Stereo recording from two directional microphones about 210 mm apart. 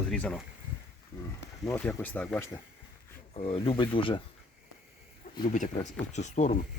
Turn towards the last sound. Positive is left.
turn(degrees=35)  # may be behind; listen again after turning